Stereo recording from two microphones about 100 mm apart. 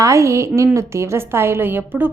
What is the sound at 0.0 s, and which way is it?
A woman's voice, 30° right (ahead or behind).